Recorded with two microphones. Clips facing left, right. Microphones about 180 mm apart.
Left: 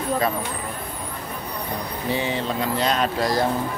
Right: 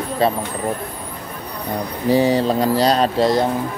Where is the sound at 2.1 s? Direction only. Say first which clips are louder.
Right 10 dB; 40° right (ahead or behind).